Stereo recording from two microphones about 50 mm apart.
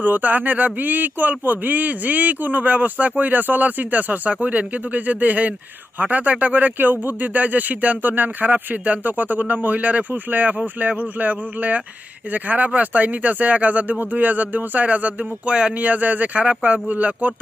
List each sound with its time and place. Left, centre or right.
0.0 s speech: right; by 15.7 s centre
15.8 s speech: right